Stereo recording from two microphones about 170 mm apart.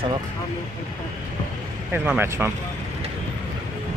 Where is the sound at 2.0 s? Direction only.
15° right (ahead or behind).